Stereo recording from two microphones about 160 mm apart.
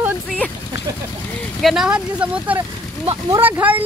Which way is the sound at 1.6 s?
Centre (ahead or behind).